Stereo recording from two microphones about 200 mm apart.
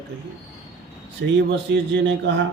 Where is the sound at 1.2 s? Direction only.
60° right (ahead or behind).